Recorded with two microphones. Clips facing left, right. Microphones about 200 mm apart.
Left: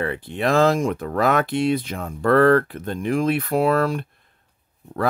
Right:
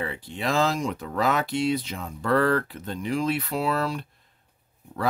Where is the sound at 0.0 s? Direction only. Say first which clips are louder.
Left 6 dB; 60° left (ahead or behind).